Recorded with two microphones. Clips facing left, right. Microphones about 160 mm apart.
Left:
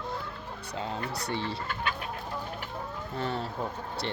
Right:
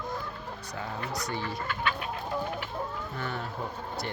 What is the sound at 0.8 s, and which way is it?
Speech, 25° left (ahead or behind).